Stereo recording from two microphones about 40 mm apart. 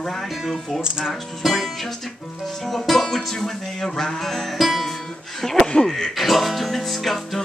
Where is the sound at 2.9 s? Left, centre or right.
Centre.